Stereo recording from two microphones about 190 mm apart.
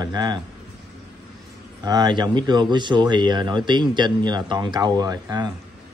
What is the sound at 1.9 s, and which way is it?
Speech, 20° right (ahead or behind).